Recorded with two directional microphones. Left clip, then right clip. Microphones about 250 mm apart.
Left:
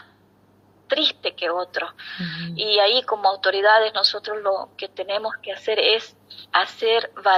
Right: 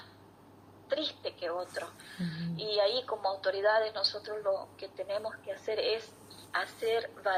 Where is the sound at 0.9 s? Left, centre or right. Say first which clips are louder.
Left 13 dB; left.